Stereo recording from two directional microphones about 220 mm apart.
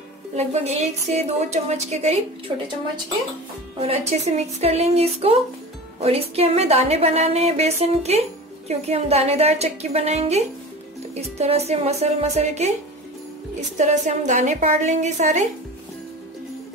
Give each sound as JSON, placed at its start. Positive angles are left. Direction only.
{"t": 0.4, "sound": "a woman's voice", "side_deg": -30}
{"t": 3.8, "sound": "a woman's voice", "side_deg": -30}
{"t": 13.7, "sound": "a woman's voice", "side_deg": -35}